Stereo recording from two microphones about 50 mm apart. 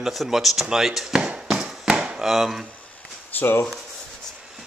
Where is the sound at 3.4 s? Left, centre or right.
Left.